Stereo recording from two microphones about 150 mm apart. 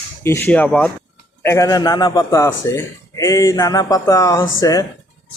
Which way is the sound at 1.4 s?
20° left (ahead or behind).